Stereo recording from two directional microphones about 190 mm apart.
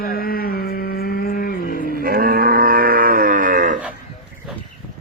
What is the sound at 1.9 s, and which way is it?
Livestock, 50° right (ahead or behind).